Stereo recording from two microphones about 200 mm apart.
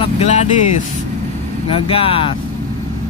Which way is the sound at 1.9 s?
25° left (ahead or behind).